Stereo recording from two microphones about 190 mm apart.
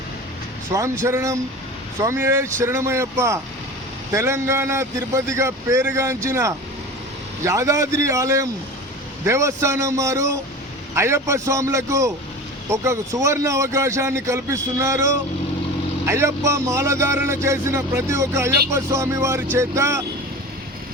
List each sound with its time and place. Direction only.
0.7 s speech: 15° right (ahead or behind)